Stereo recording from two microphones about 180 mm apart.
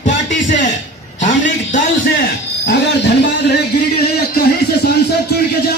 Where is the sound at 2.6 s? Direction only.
70° left (ahead or behind).